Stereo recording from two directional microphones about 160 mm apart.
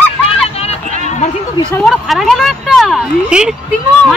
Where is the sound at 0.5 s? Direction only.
40° left (ahead or behind).